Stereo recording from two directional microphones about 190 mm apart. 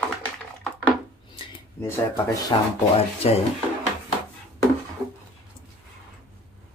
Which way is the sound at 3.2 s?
30° left (ahead or behind).